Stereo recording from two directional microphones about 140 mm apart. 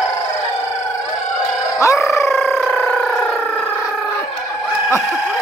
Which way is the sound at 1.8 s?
20° left (ahead or behind).